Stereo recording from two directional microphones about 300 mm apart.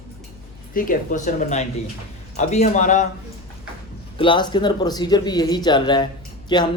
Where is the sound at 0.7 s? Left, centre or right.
Left.